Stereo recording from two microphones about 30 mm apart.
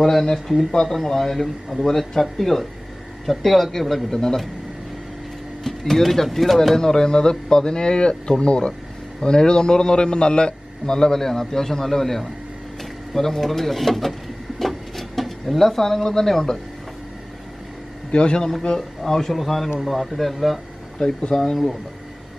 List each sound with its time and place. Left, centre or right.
0.0 s a man's voice: centre
4.1 s a man's voice: centre
5.6 s a man's voice: centre
6.8 s speech: left
10.9 s a man's voice: centre
14.6 s a sound: centre
18.1 s a man's voice: left
18.8 s a man's voice: centre
19.3 s speech: centre